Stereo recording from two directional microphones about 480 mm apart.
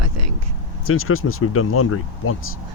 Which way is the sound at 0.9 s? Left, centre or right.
Left.